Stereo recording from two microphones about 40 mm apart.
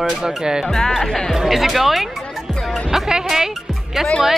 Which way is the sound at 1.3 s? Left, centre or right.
Centre.